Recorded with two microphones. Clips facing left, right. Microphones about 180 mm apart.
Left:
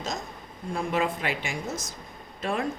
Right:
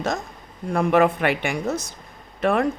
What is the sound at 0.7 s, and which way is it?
Speech, 65° right (ahead or behind).